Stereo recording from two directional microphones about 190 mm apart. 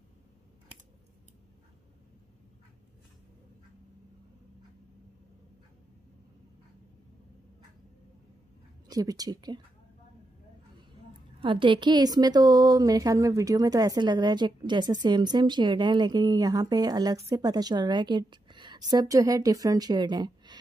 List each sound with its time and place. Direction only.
8.8 s speech: 20° right (ahead or behind)
11.4 s a woman's voice: 25° right (ahead or behind)